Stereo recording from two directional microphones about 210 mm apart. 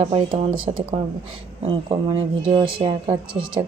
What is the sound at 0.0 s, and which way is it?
Speech, 25° right (ahead or behind).